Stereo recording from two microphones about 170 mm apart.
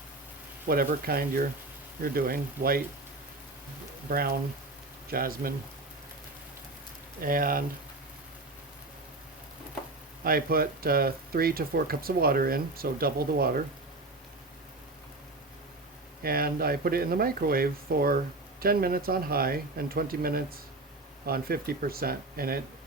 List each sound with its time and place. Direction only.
0.7 s speech: 60° right (ahead or behind)
4.1 s speech: 60° right (ahead or behind)
7.2 s speech: 55° right (ahead or behind)
10.2 s speech: 60° right (ahead or behind)
16.2 s speech: 60° right (ahead or behind)